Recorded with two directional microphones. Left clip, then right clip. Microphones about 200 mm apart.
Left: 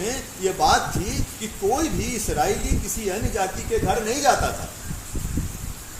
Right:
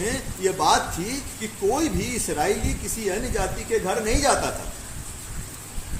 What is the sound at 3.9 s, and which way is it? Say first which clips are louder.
Speech: left 3 dB; 15° right (ahead or behind).